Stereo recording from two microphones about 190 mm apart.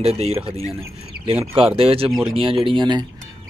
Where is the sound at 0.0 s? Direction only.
35° right (ahead or behind).